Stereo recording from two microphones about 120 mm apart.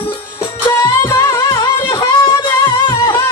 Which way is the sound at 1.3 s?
35° left (ahead or behind).